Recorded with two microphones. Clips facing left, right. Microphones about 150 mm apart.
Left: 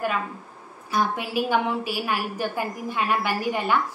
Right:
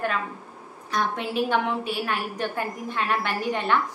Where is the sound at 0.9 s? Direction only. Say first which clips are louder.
Left 1 dB; 5° left (ahead or behind).